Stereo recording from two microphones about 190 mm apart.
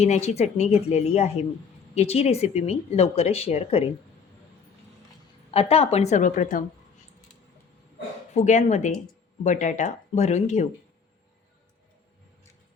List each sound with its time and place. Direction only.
0.0 s speech: 35° left (ahead or behind)
5.5 s speech: 30° left (ahead or behind)
8.3 s speech: 40° left (ahead or behind)